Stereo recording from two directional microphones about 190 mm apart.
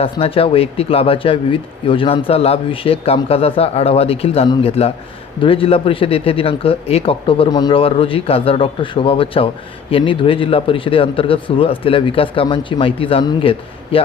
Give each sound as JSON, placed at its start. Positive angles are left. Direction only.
{"t": 0.0, "sound": "speech", "side_deg": 30}